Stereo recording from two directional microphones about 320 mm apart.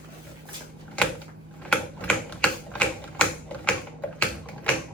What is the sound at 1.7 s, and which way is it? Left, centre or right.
Typewriter, centre.